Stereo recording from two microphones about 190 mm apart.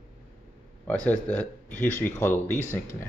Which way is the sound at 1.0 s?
5° left (ahead or behind).